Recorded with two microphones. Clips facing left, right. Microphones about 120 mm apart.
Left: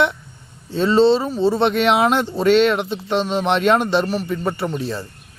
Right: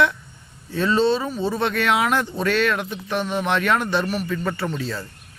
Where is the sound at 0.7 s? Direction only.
25° left (ahead or behind).